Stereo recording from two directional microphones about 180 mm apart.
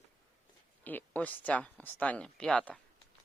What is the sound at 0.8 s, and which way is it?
Speech, 10° left (ahead or behind).